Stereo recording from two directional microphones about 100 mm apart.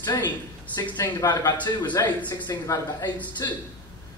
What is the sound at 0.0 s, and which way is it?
A man's voice, 45° left (ahead or behind).